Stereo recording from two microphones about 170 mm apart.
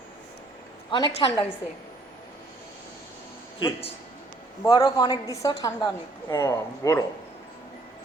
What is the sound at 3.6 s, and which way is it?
A woman's voice, 25° left (ahead or behind).